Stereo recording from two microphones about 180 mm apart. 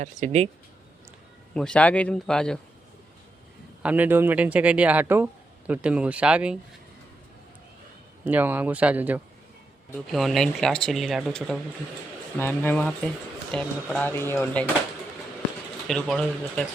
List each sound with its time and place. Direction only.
0.0 s speech: 40° right (ahead or behind)
1.5 s speech: 5° left (ahead or behind)
3.8 s speech: 10° right (ahead or behind)
8.2 s speech: 10° right (ahead or behind); by 14.7 s 10° left (ahead or behind)
15.9 s speech: 5° left (ahead or behind)